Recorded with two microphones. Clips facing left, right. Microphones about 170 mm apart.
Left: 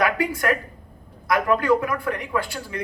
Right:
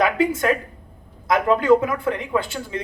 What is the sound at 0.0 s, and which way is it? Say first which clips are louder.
A man's voice: right 3 dB; 20° right (ahead or behind).